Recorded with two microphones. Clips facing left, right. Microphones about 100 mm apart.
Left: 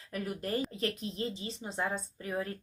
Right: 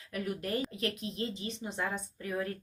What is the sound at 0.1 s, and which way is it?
A woman's voice, 30° left (ahead or behind).